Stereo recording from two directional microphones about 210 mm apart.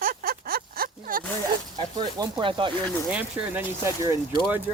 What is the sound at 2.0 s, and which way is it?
Speech, 20° right (ahead or behind).